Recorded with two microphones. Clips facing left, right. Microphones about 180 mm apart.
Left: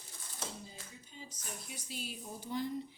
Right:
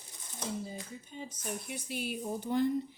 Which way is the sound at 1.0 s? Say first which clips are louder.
Right 9 dB; 55° right (ahead or behind).